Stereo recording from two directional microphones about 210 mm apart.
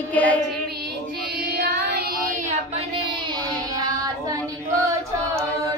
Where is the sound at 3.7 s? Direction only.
15° right (ahead or behind).